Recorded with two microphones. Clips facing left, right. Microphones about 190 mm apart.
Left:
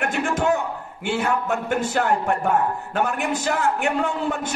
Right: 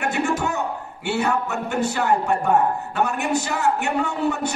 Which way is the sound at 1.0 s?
50° left (ahead or behind).